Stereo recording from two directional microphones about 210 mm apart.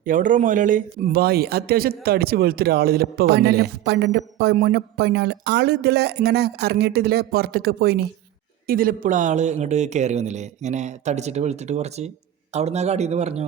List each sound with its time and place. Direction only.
0.0 s a man's voice: 40° right (ahead or behind)